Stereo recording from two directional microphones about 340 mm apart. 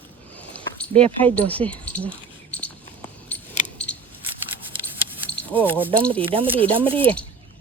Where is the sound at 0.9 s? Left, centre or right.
Centre.